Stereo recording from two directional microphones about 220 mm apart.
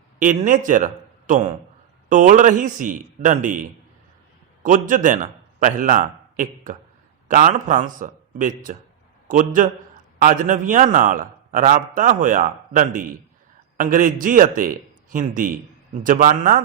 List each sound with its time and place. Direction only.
0.2 s a man's voice: 35° right (ahead or behind)